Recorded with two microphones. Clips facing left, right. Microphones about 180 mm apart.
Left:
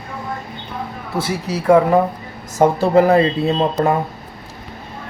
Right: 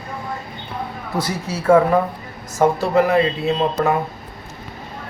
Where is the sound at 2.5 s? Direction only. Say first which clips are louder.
Left 3 dB; 35° left (ahead or behind).